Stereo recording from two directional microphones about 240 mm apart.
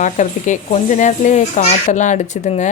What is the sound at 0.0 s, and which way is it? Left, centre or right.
Speech, left.